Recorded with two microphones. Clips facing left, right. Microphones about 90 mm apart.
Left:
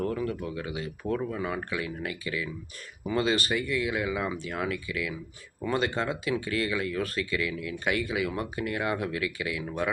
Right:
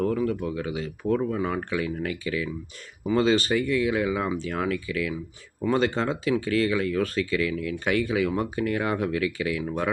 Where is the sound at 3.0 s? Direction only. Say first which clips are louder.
Right 5 dB; 30° right (ahead or behind).